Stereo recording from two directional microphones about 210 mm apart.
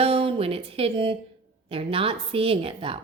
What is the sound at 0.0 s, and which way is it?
Speech, 25° right (ahead or behind).